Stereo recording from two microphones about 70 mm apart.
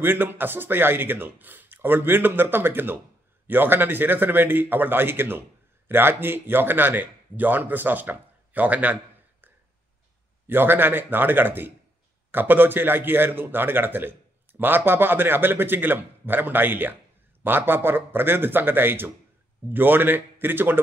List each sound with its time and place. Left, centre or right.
0.0 s speech: right
10.4 s speech: right